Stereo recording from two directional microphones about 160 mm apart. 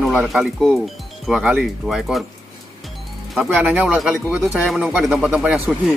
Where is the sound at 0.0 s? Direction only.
Centre (ahead or behind).